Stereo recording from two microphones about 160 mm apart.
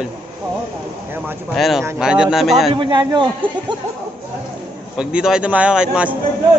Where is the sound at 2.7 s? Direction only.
30° right (ahead or behind).